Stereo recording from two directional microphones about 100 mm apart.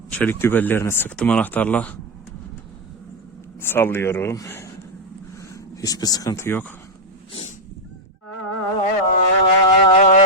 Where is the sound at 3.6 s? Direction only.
20° left (ahead or behind).